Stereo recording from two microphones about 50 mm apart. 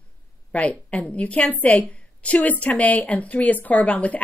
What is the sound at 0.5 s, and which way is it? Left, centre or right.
A woman's voice, left.